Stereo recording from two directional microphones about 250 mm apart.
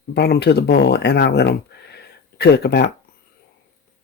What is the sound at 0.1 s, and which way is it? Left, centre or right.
Speech, left.